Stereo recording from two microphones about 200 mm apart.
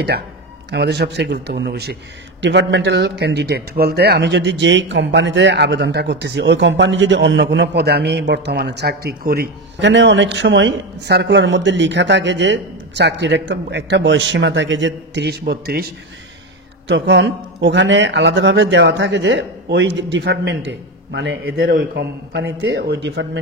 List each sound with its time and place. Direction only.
0.7 s a man's voice: 55° right (ahead or behind)